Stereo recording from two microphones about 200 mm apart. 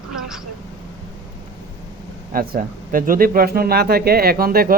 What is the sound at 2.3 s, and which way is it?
Speech, 45° right (ahead or behind).